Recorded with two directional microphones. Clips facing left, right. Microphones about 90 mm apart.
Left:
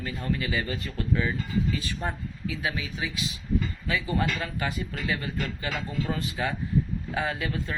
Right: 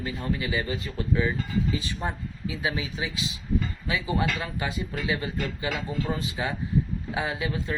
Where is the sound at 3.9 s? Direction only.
15° right (ahead or behind).